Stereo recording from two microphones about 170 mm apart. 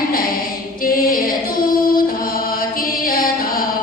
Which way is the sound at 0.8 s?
55° left (ahead or behind).